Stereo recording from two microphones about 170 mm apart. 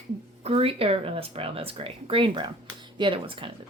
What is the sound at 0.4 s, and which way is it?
Speech, 35° right (ahead or behind).